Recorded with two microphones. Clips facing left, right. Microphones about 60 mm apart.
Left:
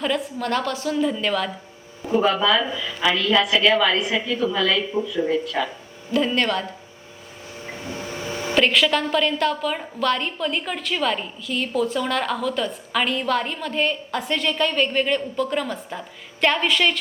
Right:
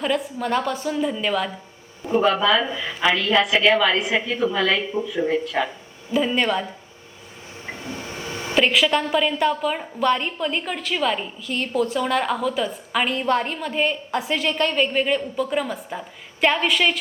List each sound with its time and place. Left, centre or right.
0.0 s a woman's voice: centre
2.7 s a woman's voice: right
3.2 s a woman's voice: centre
5.6 s speech: right
6.1 s a woman's voice: centre
8.1 s a sound: left
8.5 s a woman's voice: centre